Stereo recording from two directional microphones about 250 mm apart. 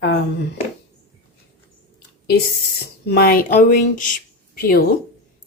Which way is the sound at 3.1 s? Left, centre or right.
Left.